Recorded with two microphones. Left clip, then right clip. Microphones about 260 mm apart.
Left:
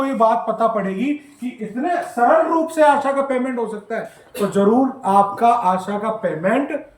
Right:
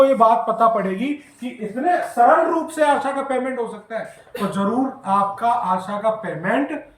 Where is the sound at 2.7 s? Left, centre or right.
Centre.